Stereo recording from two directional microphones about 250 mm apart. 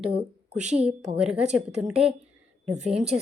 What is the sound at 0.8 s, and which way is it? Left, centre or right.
Speech, centre.